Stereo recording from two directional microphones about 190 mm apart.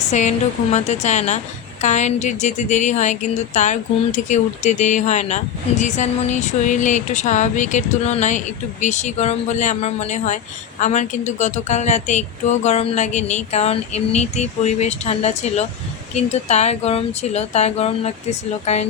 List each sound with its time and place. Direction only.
0.1 s a woman's voice: 35° left (ahead or behind)